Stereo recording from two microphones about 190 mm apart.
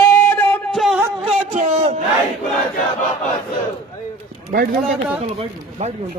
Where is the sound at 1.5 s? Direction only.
40° right (ahead or behind).